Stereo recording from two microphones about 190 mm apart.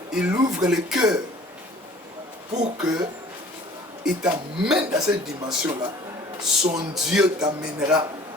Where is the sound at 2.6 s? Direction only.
20° right (ahead or behind).